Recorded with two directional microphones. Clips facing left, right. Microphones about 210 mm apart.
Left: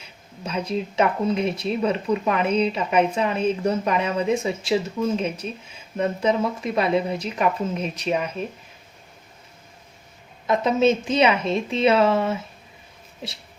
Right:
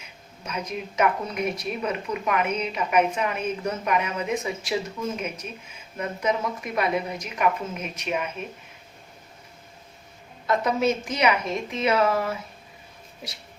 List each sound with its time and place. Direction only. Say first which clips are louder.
0.0 s speech: left 6 dB; 30° left (ahead or behind)
10.4 s speech: left 4 dB; 20° left (ahead or behind)